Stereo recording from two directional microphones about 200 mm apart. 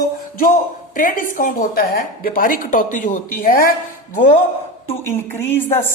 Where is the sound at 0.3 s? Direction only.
40° left (ahead or behind).